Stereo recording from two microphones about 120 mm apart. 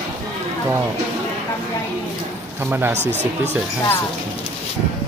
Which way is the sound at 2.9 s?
70° right (ahead or behind).